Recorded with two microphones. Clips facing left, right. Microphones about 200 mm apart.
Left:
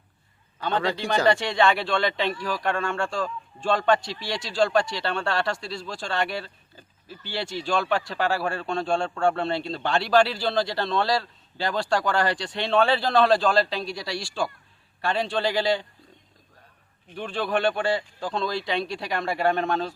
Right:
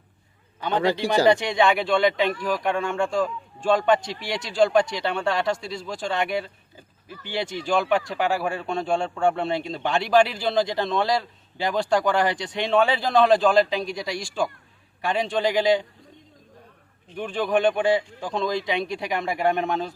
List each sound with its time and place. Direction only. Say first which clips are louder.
0.6 s speech: right 3 dB; 20° right (ahead or behind)
17.2 s speech: right 3 dB; 15° right (ahead or behind)